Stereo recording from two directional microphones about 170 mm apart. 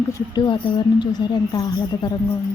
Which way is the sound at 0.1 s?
25° left (ahead or behind).